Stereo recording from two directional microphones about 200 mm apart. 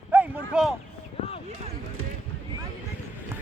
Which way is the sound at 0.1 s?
5° right (ahead or behind).